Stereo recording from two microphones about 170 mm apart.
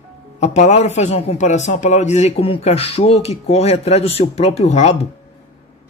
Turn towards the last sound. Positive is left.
turn(degrees=40)  # may be behind; listen again after turning